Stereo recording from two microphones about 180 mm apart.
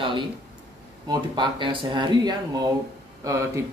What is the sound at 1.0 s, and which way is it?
A man's voice, 25° right (ahead or behind).